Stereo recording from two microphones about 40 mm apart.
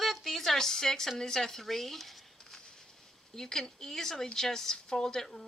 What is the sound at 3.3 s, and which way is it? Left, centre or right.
Speech, centre.